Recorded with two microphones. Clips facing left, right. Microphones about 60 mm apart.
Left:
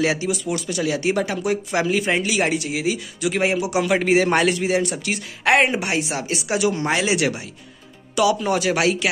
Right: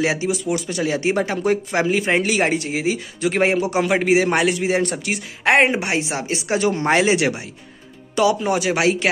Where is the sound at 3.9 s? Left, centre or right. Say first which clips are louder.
Even; centre.